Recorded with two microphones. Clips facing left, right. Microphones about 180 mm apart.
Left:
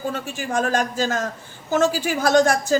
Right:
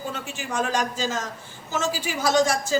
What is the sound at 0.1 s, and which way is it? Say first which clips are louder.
A woman's voice: left 5 dB; 50° left (ahead or behind).